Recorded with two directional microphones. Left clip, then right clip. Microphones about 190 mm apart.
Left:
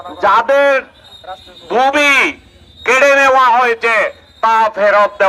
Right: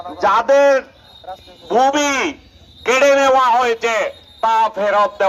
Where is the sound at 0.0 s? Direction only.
35° right (ahead or behind).